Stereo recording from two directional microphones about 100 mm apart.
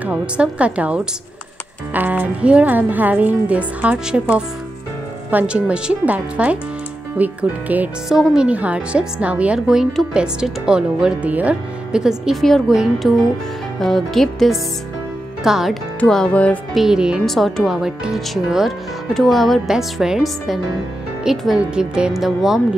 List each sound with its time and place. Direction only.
0.0 s speech: 10° right (ahead or behind)
8.1 s speech: 5° right (ahead or behind)
16.0 s speech: 10° left (ahead or behind)
16.7 s speech: 5° right (ahead or behind)